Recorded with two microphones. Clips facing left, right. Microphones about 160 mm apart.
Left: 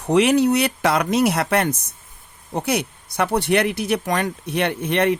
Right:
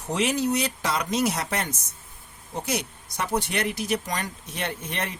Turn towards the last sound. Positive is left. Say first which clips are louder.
# left 11 dB
turn(degrees=65)  # may be behind; listen again after turning